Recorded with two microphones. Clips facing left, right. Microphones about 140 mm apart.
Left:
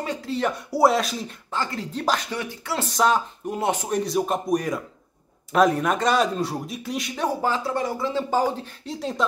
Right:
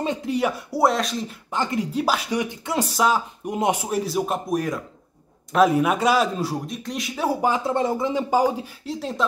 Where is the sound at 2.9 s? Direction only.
5° right (ahead or behind).